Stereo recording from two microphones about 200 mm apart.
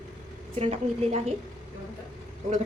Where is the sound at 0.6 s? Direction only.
30° right (ahead or behind).